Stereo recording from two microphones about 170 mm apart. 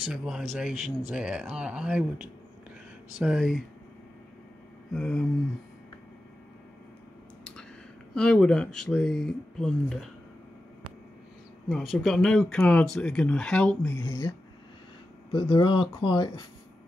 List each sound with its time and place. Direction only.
0.1 s speech: centre (ahead or behind)
3.2 s speech: 5° right (ahead or behind)
4.9 s speech: 5° left (ahead or behind)
8.1 s speech: 5° left (ahead or behind)
11.7 s speech: centre (ahead or behind)
15.3 s speech: 30° left (ahead or behind)